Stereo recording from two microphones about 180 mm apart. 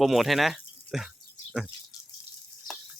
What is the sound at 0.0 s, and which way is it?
Speech, centre (ahead or behind).